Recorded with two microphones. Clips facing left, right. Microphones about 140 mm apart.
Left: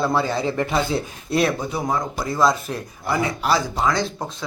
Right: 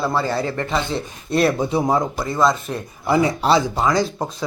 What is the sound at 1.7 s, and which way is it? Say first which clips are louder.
Speech: right 6 dB; 30° right (ahead or behind).